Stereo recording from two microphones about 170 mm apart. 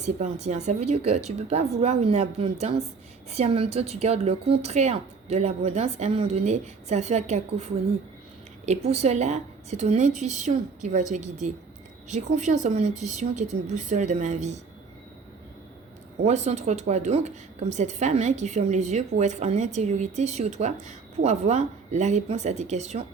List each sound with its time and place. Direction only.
0.0 s a woman's voice: 40° right (ahead or behind)
8.6 s speech: 40° right (ahead or behind)
16.2 s a woman's voice: 40° right (ahead or behind)